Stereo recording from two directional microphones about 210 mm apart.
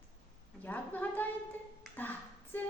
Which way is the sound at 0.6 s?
10° left (ahead or behind).